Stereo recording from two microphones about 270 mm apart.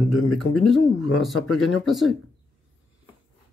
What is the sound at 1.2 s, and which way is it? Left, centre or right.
Speech, centre.